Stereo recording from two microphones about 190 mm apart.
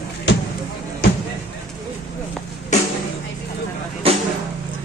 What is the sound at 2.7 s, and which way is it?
Music, 40° left (ahead or behind).